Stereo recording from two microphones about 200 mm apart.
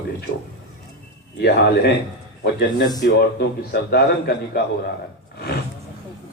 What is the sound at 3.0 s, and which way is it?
A man's voice, 50° left (ahead or behind).